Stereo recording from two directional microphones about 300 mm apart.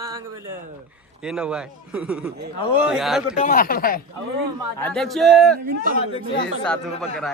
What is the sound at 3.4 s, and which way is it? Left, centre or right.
Speech, left.